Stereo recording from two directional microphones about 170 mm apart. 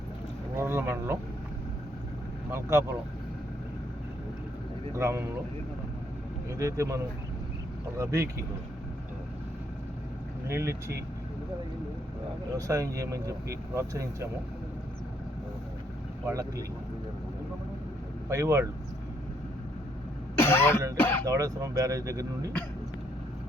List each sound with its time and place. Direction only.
0.5 s boat: 15° right (ahead or behind)
2.5 s speech: 15° right (ahead or behind)
4.9 s speech: 15° right (ahead or behind)
6.6 s speech: 15° right (ahead or behind)
10.5 s speech: 15° right (ahead or behind)
12.5 s speech: 20° right (ahead or behind)
16.2 s speech: 20° right (ahead or behind)
18.3 s speech: 15° right (ahead or behind)
20.3 s cough: 15° left (ahead or behind)
20.9 s speech: 10° left (ahead or behind)
21.2 s speech: 20° right (ahead or behind)